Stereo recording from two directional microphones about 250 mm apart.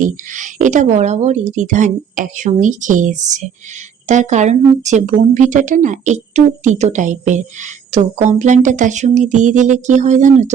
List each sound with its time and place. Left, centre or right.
0.0 s a woman's voice: right